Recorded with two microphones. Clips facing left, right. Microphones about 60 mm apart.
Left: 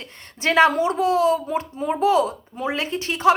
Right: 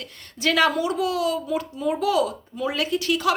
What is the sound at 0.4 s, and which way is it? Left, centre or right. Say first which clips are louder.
A woman's voice: left 4 dB; left.